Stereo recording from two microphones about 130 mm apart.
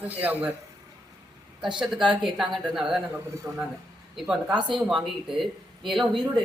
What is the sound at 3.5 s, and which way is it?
Speech, 20° right (ahead or behind).